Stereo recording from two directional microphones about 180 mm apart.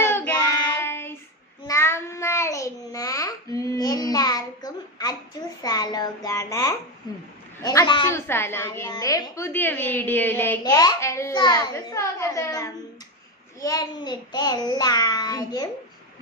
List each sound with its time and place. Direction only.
0.0 s child singing: 15° left (ahead or behind)
5.6 s a child's voice: 20° left (ahead or behind)